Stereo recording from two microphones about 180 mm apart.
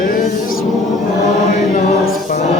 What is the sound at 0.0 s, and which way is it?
Chant, 50° left (ahead or behind).